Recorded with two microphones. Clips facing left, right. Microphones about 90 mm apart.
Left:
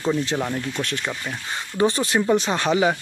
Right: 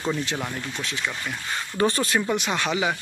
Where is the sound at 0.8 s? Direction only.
55° left (ahead or behind).